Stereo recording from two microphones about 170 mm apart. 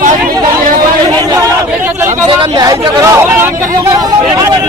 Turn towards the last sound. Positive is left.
turn(degrees=-20)  # may be behind; listen again after turning